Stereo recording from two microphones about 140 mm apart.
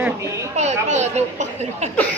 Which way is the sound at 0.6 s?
55° right (ahead or behind).